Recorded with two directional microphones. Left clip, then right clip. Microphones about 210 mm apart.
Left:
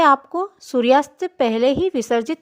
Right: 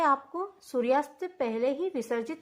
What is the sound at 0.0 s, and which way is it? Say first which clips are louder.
A woman's voice: left 11 dB; 35° left (ahead or behind).